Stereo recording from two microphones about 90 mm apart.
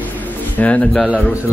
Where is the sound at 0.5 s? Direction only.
15° left (ahead or behind).